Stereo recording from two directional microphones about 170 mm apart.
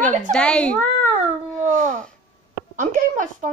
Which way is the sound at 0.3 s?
5° left (ahead or behind).